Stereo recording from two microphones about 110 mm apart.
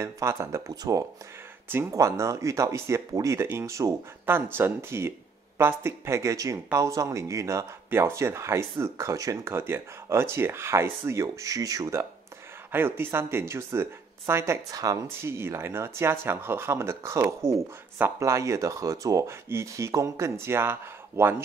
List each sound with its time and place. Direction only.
0.0 s speech: 25° right (ahead or behind)